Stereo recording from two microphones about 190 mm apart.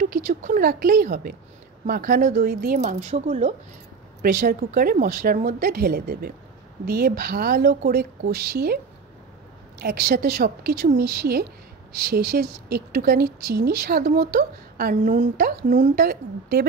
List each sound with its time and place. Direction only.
0.0 s speech: 45° right (ahead or behind)
4.2 s a woman's voice: 50° right (ahead or behind)
9.8 s a woman's voice: 55° right (ahead or behind)